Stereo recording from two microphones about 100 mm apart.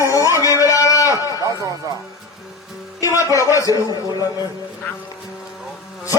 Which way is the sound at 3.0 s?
35° left (ahead or behind).